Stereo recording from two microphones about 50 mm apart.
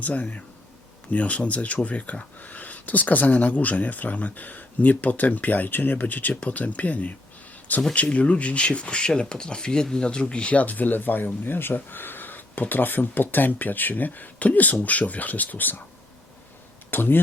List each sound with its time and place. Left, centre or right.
0.0 s speech: left
16.9 s speech: left